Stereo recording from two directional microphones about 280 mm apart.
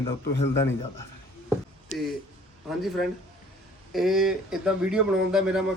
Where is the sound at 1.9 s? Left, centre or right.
Left.